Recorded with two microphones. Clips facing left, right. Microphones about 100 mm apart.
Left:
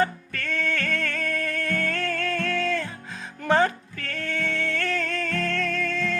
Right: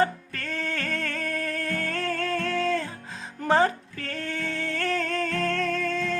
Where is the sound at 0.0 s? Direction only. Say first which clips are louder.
Even; 30° right (ahead or behind).